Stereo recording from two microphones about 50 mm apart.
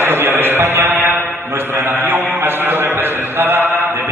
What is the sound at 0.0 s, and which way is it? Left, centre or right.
Mantra, right.